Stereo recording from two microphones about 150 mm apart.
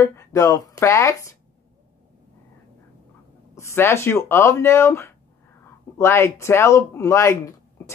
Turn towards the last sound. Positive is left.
turn(degrees=20)  # may be behind; listen again after turning